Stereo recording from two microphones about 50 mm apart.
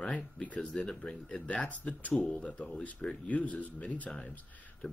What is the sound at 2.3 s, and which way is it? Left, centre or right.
Speech, left.